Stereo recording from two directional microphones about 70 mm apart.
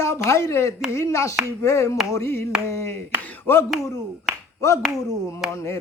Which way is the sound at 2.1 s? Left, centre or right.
Left.